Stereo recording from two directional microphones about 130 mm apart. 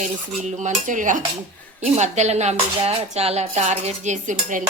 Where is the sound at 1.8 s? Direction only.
60° right (ahead or behind).